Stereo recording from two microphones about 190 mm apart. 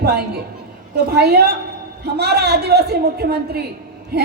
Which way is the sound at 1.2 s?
55° right (ahead or behind).